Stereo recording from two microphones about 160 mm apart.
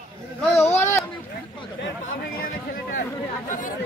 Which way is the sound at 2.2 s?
60° left (ahead or behind).